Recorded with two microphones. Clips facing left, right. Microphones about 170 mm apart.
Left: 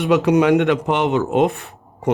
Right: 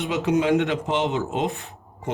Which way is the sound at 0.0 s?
70° left (ahead or behind).